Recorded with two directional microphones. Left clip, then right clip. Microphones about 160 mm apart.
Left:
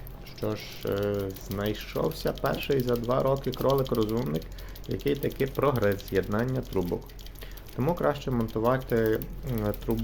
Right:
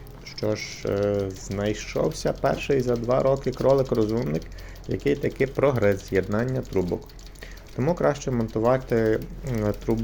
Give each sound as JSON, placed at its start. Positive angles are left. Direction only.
{"t": 0.3, "sound": "speech", "side_deg": -15}